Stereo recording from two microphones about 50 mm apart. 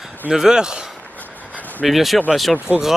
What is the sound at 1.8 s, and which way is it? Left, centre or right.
Speech, centre.